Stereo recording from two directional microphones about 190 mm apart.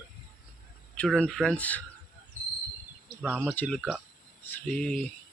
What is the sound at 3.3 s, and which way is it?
Speech, 5° left (ahead or behind).